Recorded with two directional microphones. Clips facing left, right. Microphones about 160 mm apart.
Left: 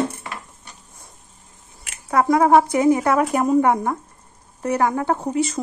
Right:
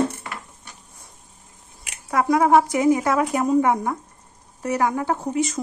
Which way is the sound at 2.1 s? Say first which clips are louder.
Left 2 dB; 45° left (ahead or behind).